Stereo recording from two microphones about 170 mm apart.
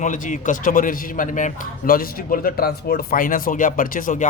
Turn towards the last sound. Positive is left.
turn(degrees=50)  # may be behind; listen again after turning